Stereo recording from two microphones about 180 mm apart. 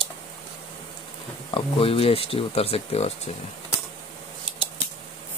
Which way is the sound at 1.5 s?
30° left (ahead or behind).